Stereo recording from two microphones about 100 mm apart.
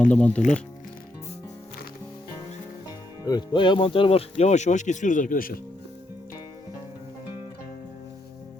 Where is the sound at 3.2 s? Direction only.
45° left (ahead or behind); by 4.5 s 75° left (ahead or behind).